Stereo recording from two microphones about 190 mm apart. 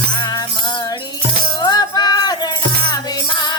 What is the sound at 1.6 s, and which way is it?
Music, 20° left (ahead or behind).